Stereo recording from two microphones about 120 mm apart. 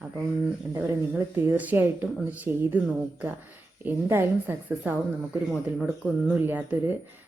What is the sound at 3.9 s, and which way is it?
A woman's voice, 20° right (ahead or behind).